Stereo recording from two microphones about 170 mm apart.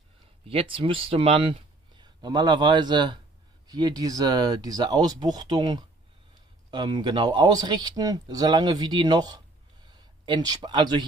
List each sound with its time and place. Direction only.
0.5 s speech: 30° right (ahead or behind)